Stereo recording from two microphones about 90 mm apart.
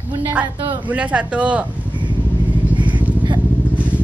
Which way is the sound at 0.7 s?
15° right (ahead or behind).